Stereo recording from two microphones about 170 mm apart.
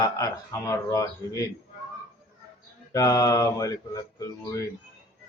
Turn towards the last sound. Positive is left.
turn(degrees=20)  # may be behind; listen again after turning